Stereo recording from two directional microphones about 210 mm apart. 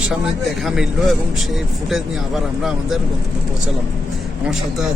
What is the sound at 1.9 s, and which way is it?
Speech, centre (ahead or behind).